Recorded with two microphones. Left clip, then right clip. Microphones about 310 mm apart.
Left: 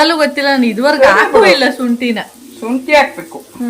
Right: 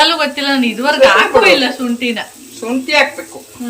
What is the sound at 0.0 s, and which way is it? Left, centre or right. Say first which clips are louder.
A woman's voice: left 2 dB; centre.